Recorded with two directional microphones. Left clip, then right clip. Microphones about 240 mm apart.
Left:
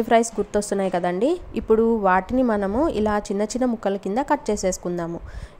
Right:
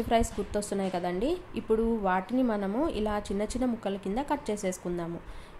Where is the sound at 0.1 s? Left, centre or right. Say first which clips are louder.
Left 9 dB; left.